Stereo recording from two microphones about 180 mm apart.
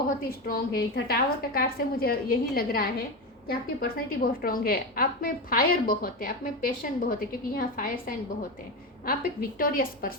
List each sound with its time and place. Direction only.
0.3 s a woman's voice: 55° left (ahead or behind)